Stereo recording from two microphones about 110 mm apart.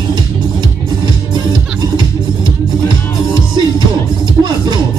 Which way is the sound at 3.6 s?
45° right (ahead or behind).